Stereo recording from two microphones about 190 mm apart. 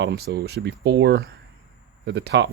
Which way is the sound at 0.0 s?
60° right (ahead or behind).